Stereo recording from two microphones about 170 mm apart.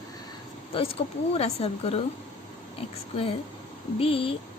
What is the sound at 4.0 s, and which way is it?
Speech, 35° left (ahead or behind).